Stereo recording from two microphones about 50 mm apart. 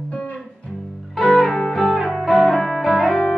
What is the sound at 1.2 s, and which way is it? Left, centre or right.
Music, centre.